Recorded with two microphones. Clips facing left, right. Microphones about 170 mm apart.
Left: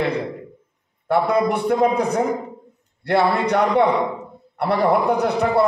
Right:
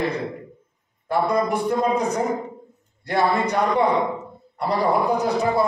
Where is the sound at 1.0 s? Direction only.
65° left (ahead or behind).